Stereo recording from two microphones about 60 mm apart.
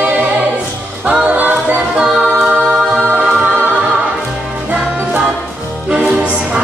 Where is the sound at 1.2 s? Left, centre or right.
Right.